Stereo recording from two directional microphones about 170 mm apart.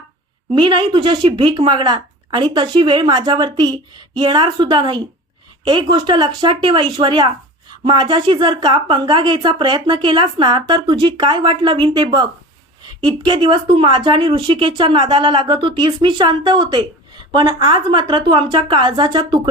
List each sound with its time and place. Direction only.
0.5 s speech: 25° right (ahead or behind)